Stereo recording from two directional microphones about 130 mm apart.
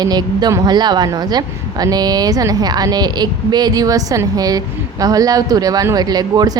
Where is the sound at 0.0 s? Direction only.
30° right (ahead or behind).